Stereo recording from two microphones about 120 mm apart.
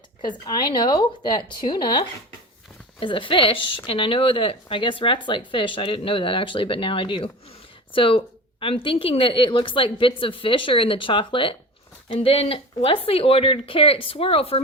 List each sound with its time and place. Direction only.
0.2 s speech: 35° left (ahead or behind)